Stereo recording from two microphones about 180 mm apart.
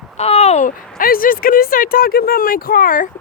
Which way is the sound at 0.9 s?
50° left (ahead or behind).